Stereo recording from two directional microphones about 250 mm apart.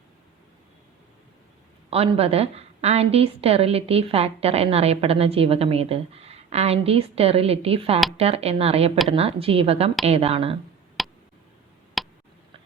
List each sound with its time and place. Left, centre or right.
1.9 s a woman's voice: right
11.0 s a sound: centre
12.0 s tick: centre